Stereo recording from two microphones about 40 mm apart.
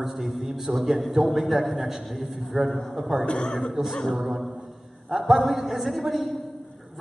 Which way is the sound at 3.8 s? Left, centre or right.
Centre.